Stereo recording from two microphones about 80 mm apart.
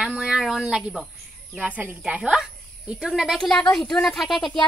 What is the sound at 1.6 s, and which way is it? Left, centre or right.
Speech, right.